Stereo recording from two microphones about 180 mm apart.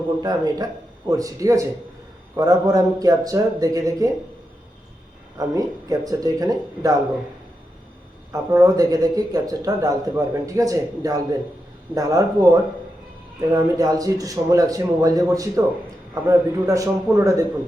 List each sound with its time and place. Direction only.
0.2 s speech: 20° right (ahead or behind)
5.4 s speech: 20° right (ahead or behind)
8.3 s a man's voice: 20° right (ahead or behind)